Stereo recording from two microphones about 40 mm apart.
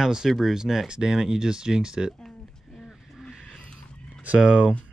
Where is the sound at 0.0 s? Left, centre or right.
Centre.